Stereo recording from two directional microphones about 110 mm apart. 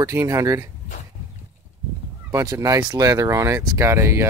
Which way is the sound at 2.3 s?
25° right (ahead or behind).